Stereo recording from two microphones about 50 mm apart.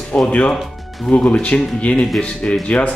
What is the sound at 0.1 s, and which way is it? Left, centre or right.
Speech, left.